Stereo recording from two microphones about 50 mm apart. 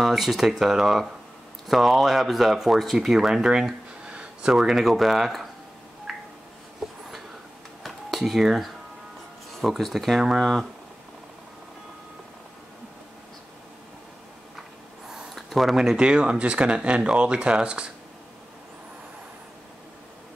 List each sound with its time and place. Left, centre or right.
0.0 s speech: centre
6.1 s a sound: centre
9.6 s speech: centre
15.3 s speech: centre
16.0 s speech: centre